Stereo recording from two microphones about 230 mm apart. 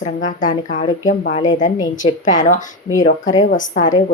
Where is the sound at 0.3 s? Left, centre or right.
Left.